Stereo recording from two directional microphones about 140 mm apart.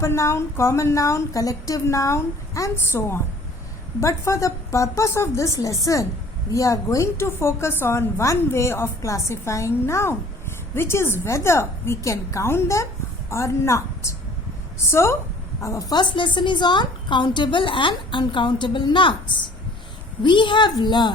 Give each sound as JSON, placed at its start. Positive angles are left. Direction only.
{"t": 0.0, "sound": "a woman's voice", "side_deg": 20}